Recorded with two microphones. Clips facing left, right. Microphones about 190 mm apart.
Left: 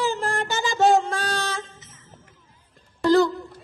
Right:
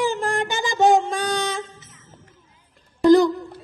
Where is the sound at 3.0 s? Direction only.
15° right (ahead or behind).